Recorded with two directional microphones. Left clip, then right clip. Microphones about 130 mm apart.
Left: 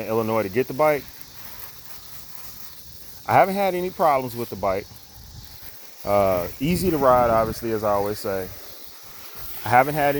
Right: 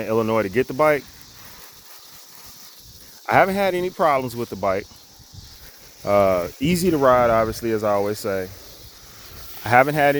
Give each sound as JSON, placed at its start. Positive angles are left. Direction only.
{"t": 0.0, "sound": "speech", "side_deg": -50}
{"t": 3.2, "sound": "speech", "side_deg": -45}
{"t": 6.1, "sound": "speech", "side_deg": -55}
{"t": 9.6, "sound": "speech", "side_deg": -55}